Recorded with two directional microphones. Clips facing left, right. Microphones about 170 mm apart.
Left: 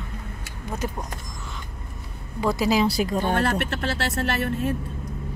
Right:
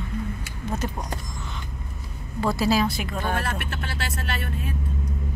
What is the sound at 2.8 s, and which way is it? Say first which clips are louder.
Speech: left 5 dB; 35° left (ahead or behind).